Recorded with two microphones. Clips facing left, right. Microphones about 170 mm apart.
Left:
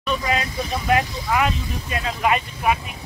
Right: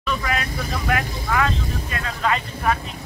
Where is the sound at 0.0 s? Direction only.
20° left (ahead or behind).